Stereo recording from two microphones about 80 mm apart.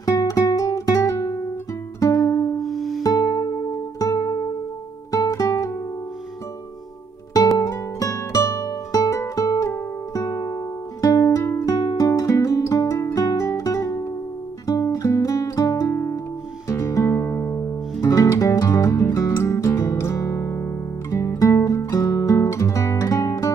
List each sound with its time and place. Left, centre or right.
0.0 s guitar: left
2.0 s music: left
2.6 s music: centre
3.0 s music: left
7.5 s music: left
11.6 s music: left